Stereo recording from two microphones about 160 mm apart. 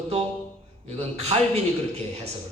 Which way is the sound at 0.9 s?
40° right (ahead or behind).